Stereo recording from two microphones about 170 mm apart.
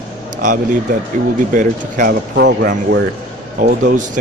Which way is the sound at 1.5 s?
50° right (ahead or behind).